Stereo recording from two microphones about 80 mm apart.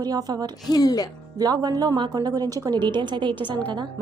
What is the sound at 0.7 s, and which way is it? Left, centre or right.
Speech, left.